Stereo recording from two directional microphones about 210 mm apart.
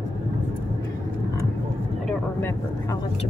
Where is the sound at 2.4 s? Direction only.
10° left (ahead or behind).